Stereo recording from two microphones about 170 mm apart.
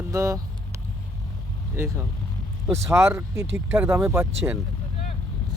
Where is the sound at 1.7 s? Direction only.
15° right (ahead or behind).